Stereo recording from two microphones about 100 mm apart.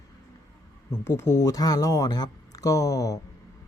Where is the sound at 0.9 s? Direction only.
25° left (ahead or behind).